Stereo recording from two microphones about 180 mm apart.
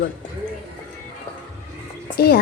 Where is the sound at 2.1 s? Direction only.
60° left (ahead or behind).